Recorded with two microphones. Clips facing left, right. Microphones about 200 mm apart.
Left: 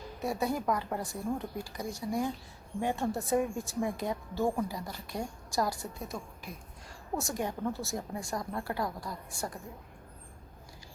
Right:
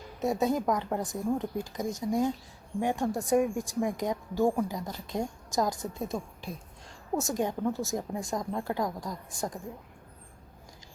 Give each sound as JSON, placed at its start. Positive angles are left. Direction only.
{"t": 0.2, "sound": "speech", "side_deg": -20}